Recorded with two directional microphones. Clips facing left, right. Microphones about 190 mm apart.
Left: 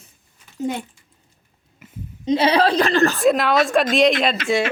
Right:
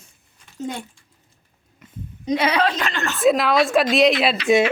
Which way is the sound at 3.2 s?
Centre (ahead or behind).